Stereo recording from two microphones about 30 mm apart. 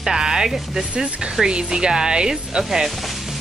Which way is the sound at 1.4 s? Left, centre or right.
Right.